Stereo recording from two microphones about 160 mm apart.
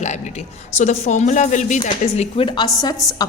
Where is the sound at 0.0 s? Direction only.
45° left (ahead or behind).